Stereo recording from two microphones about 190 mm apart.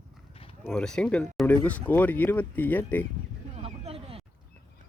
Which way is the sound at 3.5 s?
35° right (ahead or behind).